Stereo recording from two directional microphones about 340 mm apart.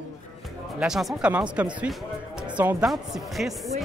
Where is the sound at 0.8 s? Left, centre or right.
Centre.